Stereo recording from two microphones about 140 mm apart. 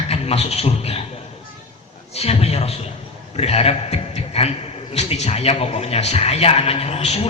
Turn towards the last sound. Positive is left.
turn(degrees=50)  # may be behind; listen again after turning